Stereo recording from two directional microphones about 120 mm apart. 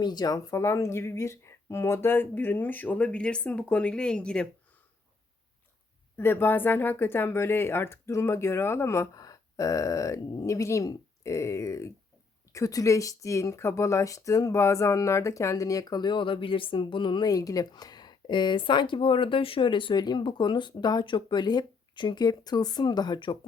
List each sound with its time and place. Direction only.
0.0 s speech: 35° left (ahead or behind); by 4.4 s 10° left (ahead or behind)
6.1 s speech: 20° left (ahead or behind); by 23.4 s 40° left (ahead or behind)